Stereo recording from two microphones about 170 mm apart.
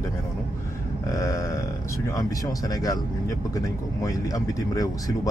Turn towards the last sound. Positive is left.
turn(degrees=20)  # may be behind; listen again after turning